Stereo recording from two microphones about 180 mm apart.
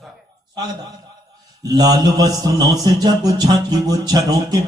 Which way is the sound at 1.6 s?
20° right (ahead or behind).